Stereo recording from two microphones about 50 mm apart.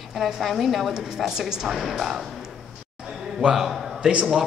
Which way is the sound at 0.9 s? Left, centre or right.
Centre.